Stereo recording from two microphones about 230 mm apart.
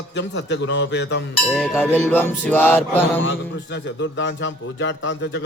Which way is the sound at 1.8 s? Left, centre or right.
Centre.